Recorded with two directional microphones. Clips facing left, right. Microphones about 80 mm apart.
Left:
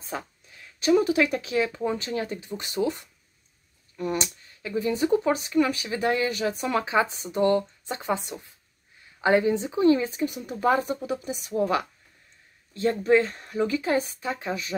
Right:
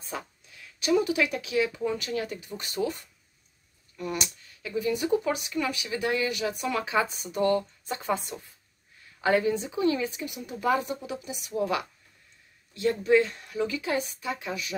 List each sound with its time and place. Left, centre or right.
0.1 s speech: left